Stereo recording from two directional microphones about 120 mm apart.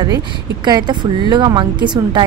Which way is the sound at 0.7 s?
35° right (ahead or behind).